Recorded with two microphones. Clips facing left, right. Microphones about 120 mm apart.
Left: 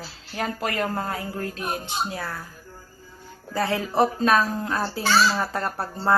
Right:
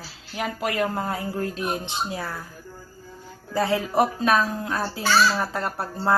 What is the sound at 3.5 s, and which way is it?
Speech, 15° right (ahead or behind).